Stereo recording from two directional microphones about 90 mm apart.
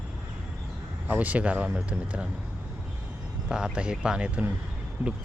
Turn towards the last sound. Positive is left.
turn(degrees=-20)  # may be behind; listen again after turning